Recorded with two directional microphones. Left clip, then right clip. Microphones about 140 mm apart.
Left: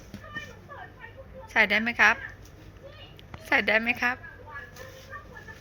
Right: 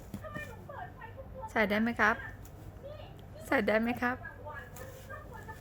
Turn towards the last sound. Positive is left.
turn(degrees=-35)  # may be behind; listen again after turning